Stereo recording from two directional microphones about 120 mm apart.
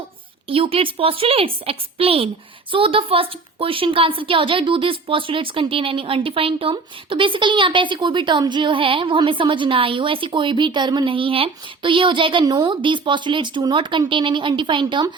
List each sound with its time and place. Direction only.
0.4 s a woman's voice: 50° right (ahead or behind)